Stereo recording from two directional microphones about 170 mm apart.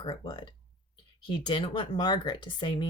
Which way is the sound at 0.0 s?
25° left (ahead or behind).